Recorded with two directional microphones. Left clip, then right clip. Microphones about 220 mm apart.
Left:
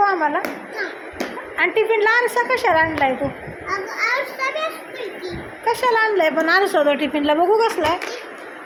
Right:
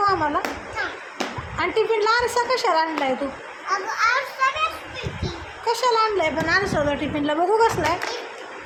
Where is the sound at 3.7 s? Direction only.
15° right (ahead or behind).